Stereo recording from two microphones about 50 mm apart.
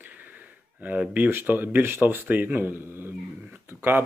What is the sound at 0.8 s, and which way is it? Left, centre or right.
Speech, right.